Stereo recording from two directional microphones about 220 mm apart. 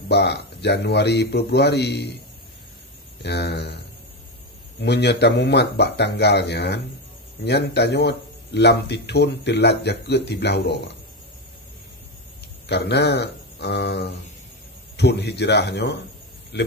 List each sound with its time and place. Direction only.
0.1 s speech: 50° left (ahead or behind)
3.2 s speech: 50° left (ahead or behind)
4.8 s speech: 50° left (ahead or behind)
12.6 s speech: 50° left (ahead or behind)